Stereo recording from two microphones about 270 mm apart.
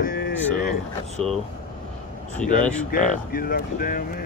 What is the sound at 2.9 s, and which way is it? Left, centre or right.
Speech, left.